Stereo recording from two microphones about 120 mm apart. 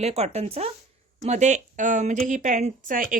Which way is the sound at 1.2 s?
75° right (ahead or behind).